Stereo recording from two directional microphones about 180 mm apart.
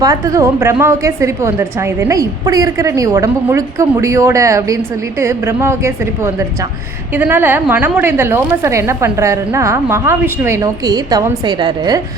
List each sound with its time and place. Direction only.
0.0 s a woman's voice: 20° right (ahead or behind)